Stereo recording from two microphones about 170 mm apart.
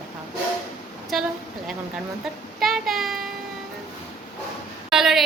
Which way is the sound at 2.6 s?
Centre (ahead or behind).